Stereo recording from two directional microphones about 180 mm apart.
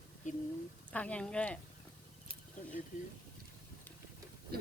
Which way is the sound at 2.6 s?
45° left (ahead or behind).